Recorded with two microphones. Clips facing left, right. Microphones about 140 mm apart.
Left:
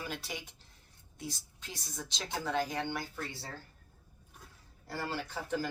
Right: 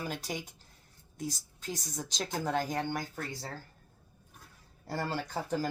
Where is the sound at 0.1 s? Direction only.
40° right (ahead or behind).